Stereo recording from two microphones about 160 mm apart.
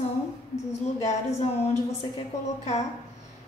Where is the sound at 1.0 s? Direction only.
40° left (ahead or behind).